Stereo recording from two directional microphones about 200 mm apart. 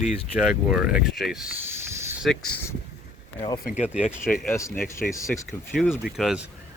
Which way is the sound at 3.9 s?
5° right (ahead or behind).